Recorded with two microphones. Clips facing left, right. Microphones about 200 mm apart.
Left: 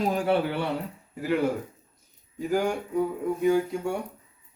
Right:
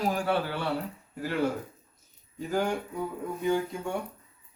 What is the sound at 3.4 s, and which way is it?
Speech, 10° left (ahead or behind).